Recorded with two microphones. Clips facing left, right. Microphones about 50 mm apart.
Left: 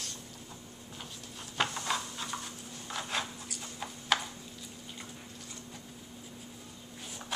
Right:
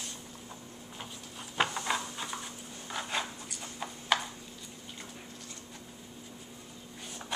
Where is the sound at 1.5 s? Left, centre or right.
Centre.